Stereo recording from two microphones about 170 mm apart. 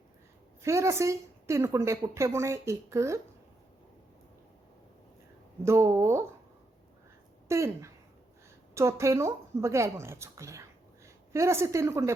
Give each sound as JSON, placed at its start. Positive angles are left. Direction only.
{"t": 0.6, "sound": "a woman's voice", "side_deg": -15}
{"t": 5.6, "sound": "a woman's voice", "side_deg": -15}
{"t": 7.4, "sound": "a woman's voice", "side_deg": -15}